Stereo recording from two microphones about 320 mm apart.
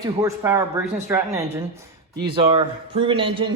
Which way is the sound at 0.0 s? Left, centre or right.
Centre.